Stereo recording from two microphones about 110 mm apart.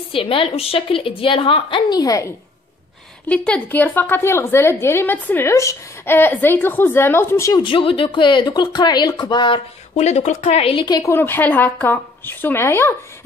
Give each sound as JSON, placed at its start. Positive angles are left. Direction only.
{"t": 0.1, "sound": "a woman's voice", "side_deg": 55}
{"t": 1.9, "sound": "a woman's voice", "side_deg": 35}
{"t": 3.3, "sound": "a woman's voice", "side_deg": 10}
{"t": 7.6, "sound": "speech", "side_deg": 50}
{"t": 9.9, "sound": "speech", "side_deg": 90}
{"t": 10.9, "sound": "a woman's voice", "side_deg": 30}
{"t": 11.1, "sound": "a woman's voice", "side_deg": 20}